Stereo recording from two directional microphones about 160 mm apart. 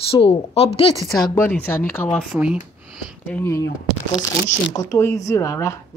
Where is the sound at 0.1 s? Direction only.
35° left (ahead or behind).